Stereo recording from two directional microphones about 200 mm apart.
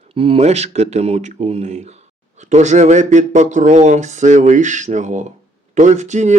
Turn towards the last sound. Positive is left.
turn(degrees=-35)  # may be behind; listen again after turning